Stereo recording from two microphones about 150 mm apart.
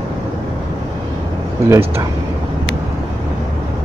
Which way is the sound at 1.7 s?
20° right (ahead or behind).